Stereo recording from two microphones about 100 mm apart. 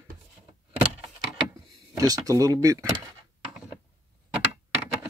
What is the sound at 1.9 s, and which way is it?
Speech, 35° right (ahead or behind).